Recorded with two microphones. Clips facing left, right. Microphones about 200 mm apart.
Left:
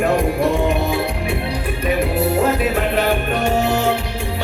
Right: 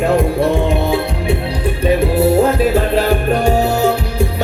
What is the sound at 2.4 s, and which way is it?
Music, 30° right (ahead or behind).